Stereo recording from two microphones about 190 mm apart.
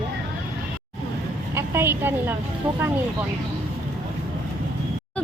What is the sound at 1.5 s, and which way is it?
Speech, 15° right (ahead or behind).